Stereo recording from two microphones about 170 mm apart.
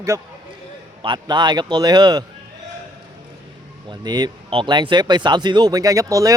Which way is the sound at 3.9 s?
25° right (ahead or behind).